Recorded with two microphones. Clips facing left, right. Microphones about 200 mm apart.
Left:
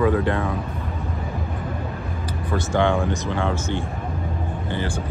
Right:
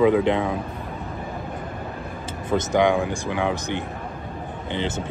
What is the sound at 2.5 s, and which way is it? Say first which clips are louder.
Speech: right 2 dB; 15° right (ahead or behind).